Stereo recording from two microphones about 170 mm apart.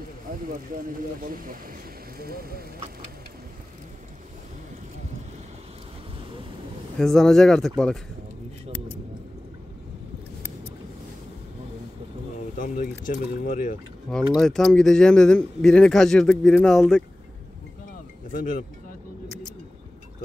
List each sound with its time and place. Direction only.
0.3 s speech: 55° right (ahead or behind)
7.0 s speech: centre (ahead or behind)
12.5 s speech: 50° left (ahead or behind)
14.3 s speech: centre (ahead or behind)
18.3 s speech: 50° left (ahead or behind)